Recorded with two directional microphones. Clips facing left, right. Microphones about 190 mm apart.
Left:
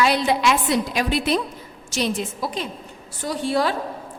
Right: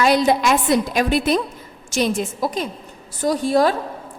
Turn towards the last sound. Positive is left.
turn(degrees=-45)  # may be behind; listen again after turning